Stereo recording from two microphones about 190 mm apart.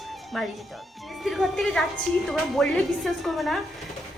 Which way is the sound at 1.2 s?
Centre (ahead or behind).